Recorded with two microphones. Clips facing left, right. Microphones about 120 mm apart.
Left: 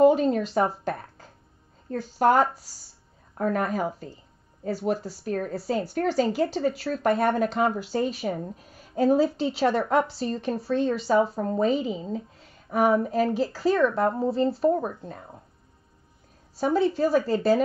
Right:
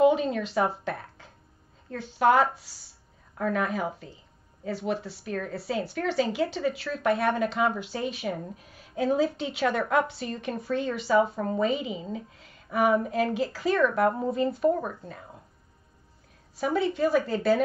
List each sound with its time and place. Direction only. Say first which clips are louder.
0.0 s speech: left 3 dB; 40° left (ahead or behind)
0.8 s music: left 3 dB; 40° left (ahead or behind)
1.9 s speech: left 1 dB; 40° left (ahead or behind)
16.5 s speech: left 3 dB; 35° left (ahead or behind)